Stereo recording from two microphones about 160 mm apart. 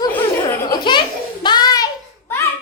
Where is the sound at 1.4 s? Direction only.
25° left (ahead or behind).